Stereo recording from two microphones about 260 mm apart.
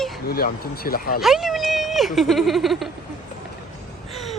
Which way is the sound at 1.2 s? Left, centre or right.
Centre.